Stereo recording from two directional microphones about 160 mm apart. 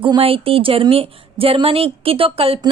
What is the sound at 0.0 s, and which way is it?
A woman's voice, 35° right (ahead or behind).